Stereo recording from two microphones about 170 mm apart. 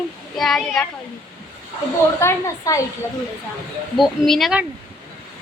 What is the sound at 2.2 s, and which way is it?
Speech, 15° left (ahead or behind).